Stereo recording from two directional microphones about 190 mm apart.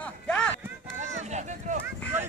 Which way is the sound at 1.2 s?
40° right (ahead or behind).